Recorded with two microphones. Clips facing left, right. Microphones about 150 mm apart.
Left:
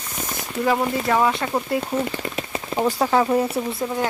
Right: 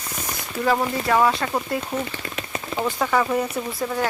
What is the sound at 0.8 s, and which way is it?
Speech, centre (ahead or behind).